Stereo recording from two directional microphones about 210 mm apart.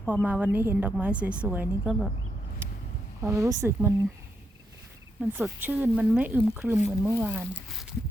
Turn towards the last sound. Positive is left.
turn(degrees=0)  # may be behind; listen again after turning